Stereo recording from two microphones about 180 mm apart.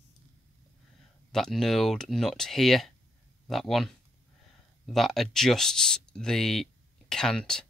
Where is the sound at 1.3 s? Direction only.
Centre (ahead or behind).